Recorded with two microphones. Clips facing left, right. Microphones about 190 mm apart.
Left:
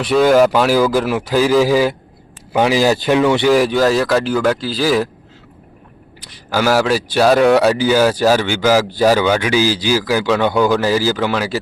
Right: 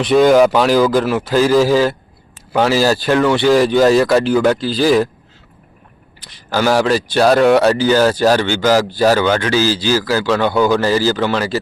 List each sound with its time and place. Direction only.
0.0 s speech: 5° left (ahead or behind)
6.2 s speech: 10° left (ahead or behind)